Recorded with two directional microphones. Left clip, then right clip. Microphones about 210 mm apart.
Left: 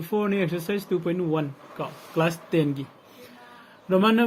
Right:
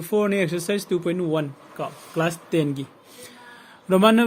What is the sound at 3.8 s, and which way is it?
Speech, 30° right (ahead or behind).